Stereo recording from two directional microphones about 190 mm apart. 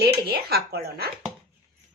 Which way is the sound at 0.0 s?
55° right (ahead or behind).